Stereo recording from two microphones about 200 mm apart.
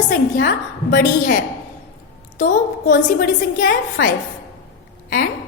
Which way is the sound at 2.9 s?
40° left (ahead or behind).